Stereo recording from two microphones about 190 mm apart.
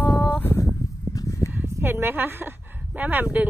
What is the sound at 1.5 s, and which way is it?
Speech, 10° right (ahead or behind).